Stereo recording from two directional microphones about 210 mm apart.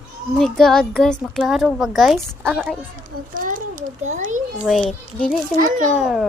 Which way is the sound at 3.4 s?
40° right (ahead or behind).